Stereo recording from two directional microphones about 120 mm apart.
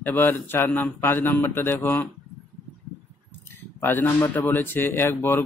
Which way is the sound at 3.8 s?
15° left (ahead or behind).